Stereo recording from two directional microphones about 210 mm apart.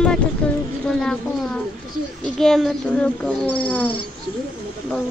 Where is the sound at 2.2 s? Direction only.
Centre (ahead or behind).